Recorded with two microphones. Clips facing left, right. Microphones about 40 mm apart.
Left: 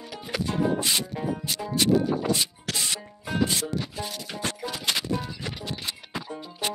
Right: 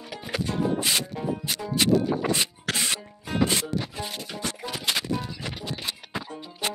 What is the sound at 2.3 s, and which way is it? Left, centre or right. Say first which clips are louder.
Rub: right 2 dB; right.